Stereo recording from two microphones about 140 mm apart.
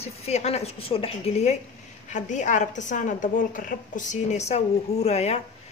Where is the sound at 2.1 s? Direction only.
60° left (ahead or behind).